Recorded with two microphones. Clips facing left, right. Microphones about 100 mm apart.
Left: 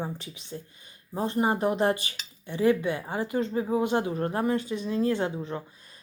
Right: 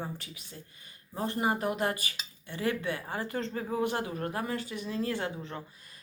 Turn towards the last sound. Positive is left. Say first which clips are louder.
# left 6 dB
turn(degrees=20)  # may be behind; listen again after turning